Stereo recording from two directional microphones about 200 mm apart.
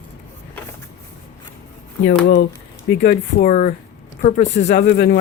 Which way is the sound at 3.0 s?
45° left (ahead or behind).